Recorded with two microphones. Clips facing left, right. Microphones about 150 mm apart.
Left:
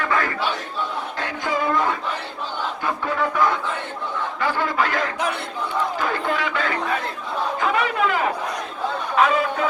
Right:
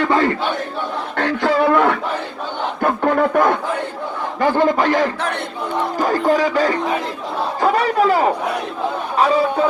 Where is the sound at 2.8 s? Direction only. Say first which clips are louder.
Right 9 dB; 55° right (ahead or behind).